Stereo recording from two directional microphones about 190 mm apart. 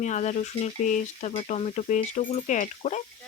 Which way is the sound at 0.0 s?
40° left (ahead or behind).